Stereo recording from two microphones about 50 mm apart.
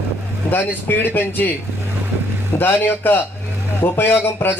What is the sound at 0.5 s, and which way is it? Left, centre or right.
A man's voice, left.